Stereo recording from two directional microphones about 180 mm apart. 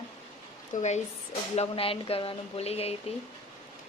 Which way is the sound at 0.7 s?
40° left (ahead or behind).